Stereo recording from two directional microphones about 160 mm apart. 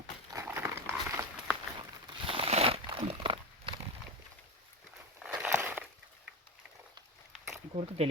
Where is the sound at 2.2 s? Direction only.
35° right (ahead or behind).